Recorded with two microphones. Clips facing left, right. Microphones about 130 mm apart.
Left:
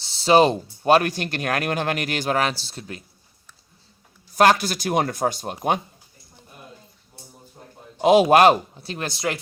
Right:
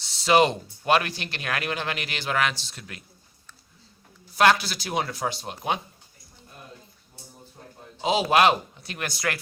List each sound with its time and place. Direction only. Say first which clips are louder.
0.0 s speech: left 4 dB; 30° left (ahead or behind)
4.4 s speech: left 3 dB; 45° left (ahead or behind)
7.9 s speech: left 7 dB; 55° left (ahead or behind); by 9.4 s 25° left (ahead or behind)